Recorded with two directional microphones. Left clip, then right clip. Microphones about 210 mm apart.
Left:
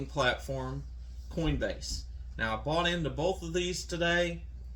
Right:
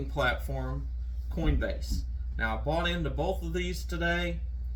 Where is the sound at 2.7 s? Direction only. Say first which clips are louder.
Left 1 dB; 15° right (ahead or behind).